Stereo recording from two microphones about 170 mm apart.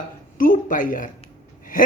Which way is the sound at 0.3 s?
55° left (ahead or behind).